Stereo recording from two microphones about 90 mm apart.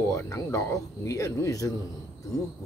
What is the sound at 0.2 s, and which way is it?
Speech, 35° left (ahead or behind).